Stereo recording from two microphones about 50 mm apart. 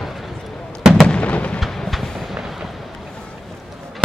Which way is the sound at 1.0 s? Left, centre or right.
Left.